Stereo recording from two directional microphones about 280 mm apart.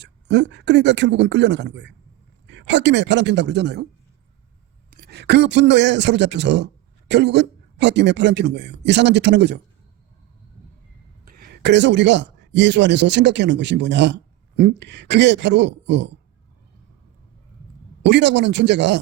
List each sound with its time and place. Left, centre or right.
0.0 s speech: right
5.0 s speech: right
11.3 s speech: right
18.0 s speech: right